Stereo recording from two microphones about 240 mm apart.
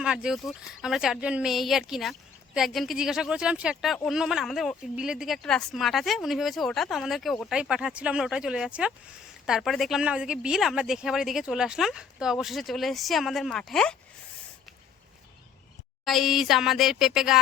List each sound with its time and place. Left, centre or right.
0.0 s speech: centre
16.0 s speech: centre